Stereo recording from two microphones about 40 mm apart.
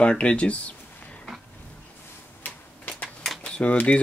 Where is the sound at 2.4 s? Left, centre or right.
Left.